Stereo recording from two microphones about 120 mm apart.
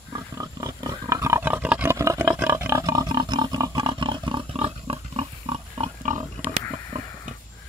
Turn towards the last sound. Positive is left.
turn(degrees=-75)  # may be behind; listen again after turning